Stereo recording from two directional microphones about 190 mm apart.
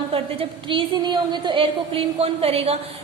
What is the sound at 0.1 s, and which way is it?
A woman's voice, 30° right (ahead or behind).